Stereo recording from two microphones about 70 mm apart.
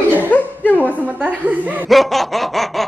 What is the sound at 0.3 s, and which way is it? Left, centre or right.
Chuckle, left.